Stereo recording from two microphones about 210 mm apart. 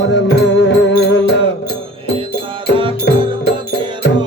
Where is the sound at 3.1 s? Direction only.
55° left (ahead or behind).